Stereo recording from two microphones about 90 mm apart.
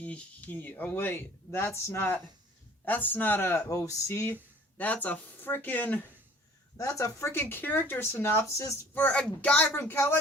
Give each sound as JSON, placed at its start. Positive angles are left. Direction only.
{"t": 0.0, "sound": "speech", "side_deg": 15}
{"t": 4.8, "sound": "speech", "side_deg": 15}
{"t": 6.7, "sound": "speech", "side_deg": 35}
{"t": 9.0, "sound": "speech", "side_deg": 20}